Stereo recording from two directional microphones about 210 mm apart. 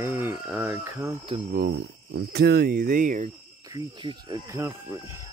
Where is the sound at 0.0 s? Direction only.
10° right (ahead or behind).